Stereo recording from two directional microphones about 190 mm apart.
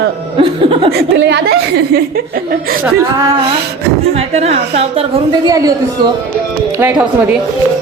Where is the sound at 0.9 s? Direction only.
60° right (ahead or behind).